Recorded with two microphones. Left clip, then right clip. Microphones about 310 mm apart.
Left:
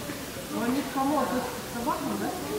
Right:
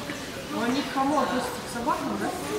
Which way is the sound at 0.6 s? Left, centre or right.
Centre.